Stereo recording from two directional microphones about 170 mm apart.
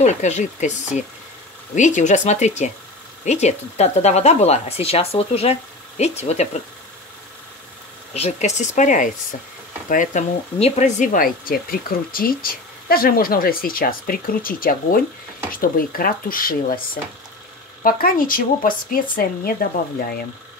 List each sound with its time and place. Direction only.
0.0 s speech: 45° left (ahead or behind)
8.1 s speech: 40° left (ahead or behind)
11.1 s speech: 60° left (ahead or behind)
17.8 s speech: 60° left (ahead or behind)